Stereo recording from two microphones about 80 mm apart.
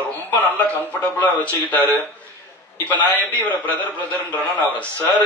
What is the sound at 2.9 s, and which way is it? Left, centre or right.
A man's voice, left.